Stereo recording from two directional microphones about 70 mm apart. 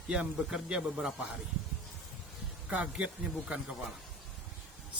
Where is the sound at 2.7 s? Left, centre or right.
Centre.